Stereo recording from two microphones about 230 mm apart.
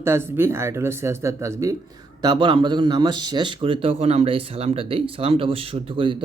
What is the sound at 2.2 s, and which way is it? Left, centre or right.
A man's voice, centre.